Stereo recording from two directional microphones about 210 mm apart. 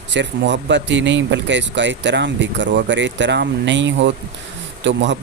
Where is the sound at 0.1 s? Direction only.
60° right (ahead or behind).